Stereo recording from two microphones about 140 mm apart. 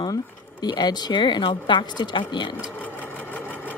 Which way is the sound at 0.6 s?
30° left (ahead or behind).